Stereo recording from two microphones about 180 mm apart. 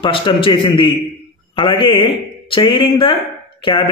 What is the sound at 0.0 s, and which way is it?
A man's voice, 30° left (ahead or behind).